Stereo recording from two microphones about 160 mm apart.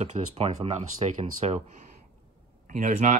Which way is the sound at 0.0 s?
45° right (ahead or behind).